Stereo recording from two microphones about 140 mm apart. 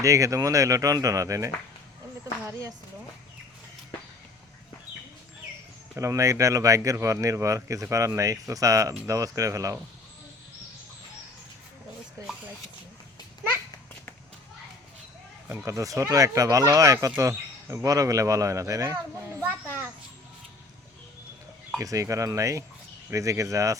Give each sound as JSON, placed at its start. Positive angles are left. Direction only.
{"t": 0.0, "sound": "speech", "side_deg": -25}
{"t": 2.5, "sound": "speech", "side_deg": -25}
{"t": 5.9, "sound": "speech", "side_deg": -20}
{"t": 15.4, "sound": "speech", "side_deg": -20}
{"t": 21.8, "sound": "speech", "side_deg": -25}